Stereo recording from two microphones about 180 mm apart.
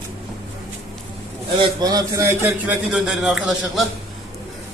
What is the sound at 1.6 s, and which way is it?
Speech, 20° right (ahead or behind).